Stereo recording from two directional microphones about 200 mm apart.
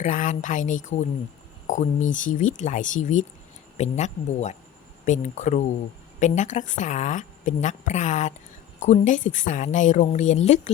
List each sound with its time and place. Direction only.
0.0 s a woman's voice: 40° left (ahead or behind)